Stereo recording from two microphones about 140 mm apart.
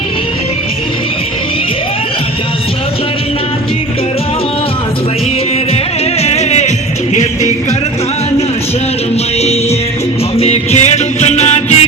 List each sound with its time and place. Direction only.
6.2 s music: 50° left (ahead or behind)
10.3 s music: 45° left (ahead or behind)